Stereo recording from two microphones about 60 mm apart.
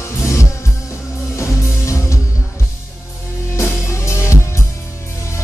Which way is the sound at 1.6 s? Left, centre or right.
Left.